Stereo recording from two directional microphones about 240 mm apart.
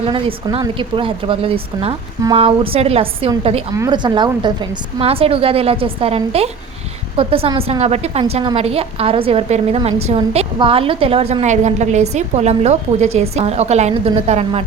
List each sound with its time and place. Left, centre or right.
0.1 s a woman's voice: right